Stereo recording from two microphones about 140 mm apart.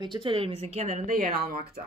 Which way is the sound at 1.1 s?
75° right (ahead or behind).